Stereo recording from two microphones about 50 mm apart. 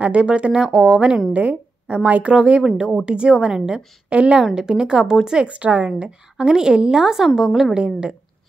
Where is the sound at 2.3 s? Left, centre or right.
Centre.